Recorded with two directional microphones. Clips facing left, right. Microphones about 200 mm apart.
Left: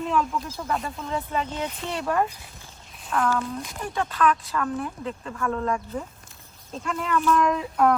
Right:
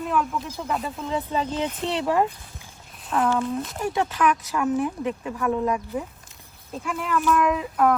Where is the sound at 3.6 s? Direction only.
5° right (ahead or behind).